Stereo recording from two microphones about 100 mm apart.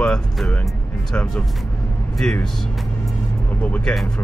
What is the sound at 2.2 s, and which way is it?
Speech, 10° left (ahead or behind).